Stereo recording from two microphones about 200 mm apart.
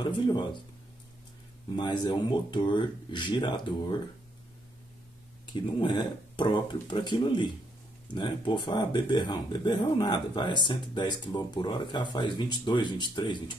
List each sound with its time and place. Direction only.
0.0 s speech: 20° left (ahead or behind)
1.8 s speech: 20° left (ahead or behind)
5.5 s speech: 25° left (ahead or behind)